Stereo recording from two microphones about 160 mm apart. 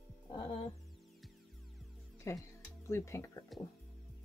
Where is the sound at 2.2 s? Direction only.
20° left (ahead or behind).